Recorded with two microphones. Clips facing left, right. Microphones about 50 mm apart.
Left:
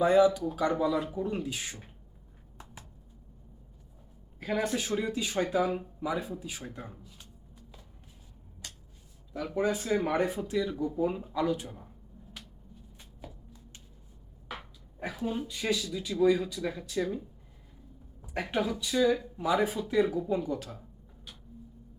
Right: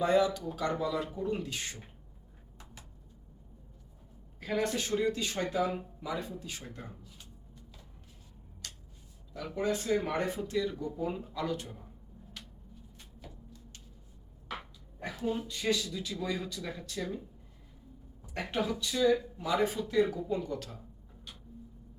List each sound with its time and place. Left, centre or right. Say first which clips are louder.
0.0 s speech: left 5 dB; centre
4.4 s speech: left 1 dB; centre
8.6 s a sound: even; centre
9.3 s speech: left 3 dB; centre
13.0 s a sound: left 4 dB; centre
14.9 s speech: left 1 dB; centre